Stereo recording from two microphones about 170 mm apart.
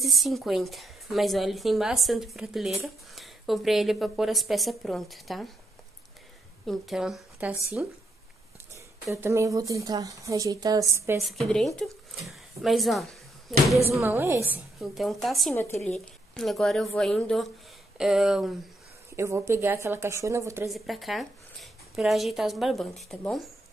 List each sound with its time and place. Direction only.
0.0 s a woman's voice: centre (ahead or behind)
6.6 s a woman's voice: centre (ahead or behind); by 11.1 s 15° right (ahead or behind)
11.1 s speech: centre (ahead or behind)
13.8 s a woman's voice: 15° right (ahead or behind)
14.8 s a woman's voice: centre (ahead or behind)
15.7 s speech: 40° left (ahead or behind)
16.3 s a woman's voice: centre (ahead or behind)
19.1 s a woman's voice: 15° right (ahead or behind)
20.7 s speech: centre (ahead or behind)